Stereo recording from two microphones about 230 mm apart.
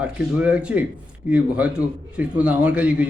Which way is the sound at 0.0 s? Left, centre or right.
Centre.